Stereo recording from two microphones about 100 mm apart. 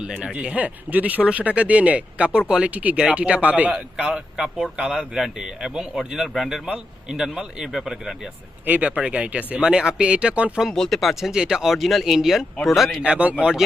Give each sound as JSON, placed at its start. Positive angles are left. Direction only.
{"t": 0.0, "sound": "speech", "side_deg": -10}
{"t": 8.6, "sound": "speech", "side_deg": -15}
{"t": 13.0, "sound": "speech", "side_deg": -10}